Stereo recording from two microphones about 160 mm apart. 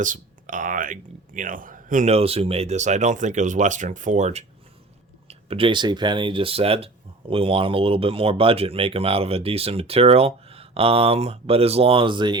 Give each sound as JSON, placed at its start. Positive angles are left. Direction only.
{"t": 0.0, "sound": "speech", "side_deg": -55}